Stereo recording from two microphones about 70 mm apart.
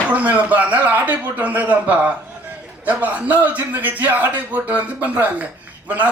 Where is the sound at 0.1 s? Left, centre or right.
Right.